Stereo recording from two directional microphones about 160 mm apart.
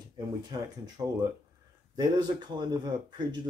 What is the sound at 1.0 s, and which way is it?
Speech, 25° right (ahead or behind).